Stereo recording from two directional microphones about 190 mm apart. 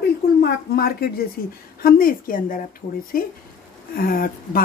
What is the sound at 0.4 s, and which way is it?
A woman's voice, 55° left (ahead or behind).